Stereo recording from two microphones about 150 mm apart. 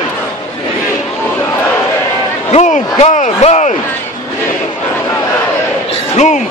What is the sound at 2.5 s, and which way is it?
Speech, 50° left (ahead or behind).